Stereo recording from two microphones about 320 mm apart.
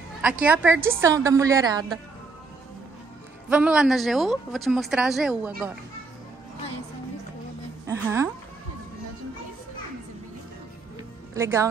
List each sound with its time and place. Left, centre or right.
0.2 s a woman's voice: centre
3.4 s speech: centre
7.8 s a woman's voice: centre
11.3 s a woman's voice: centre